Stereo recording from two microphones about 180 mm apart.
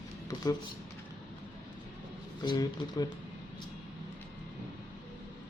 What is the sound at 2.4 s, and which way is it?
Speech, 25° left (ahead or behind).